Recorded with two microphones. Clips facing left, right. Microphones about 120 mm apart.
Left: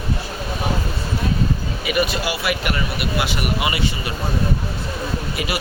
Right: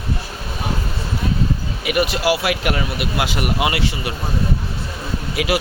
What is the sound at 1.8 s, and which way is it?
Speech, 80° right.